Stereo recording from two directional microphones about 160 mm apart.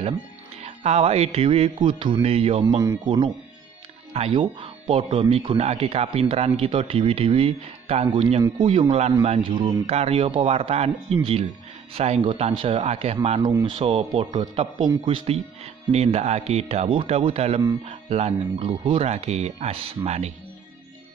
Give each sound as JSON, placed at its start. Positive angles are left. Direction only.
{"t": 0.6, "sound": "speech", "side_deg": -45}
{"t": 4.1, "sound": "speech", "side_deg": -35}
{"t": 13.4, "sound": "speech", "side_deg": -25}